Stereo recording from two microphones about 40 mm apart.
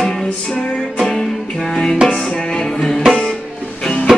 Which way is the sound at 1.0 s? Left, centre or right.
Centre.